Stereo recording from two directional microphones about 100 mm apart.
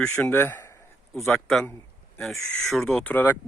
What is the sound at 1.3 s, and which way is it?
A man's voice, centre (ahead or behind).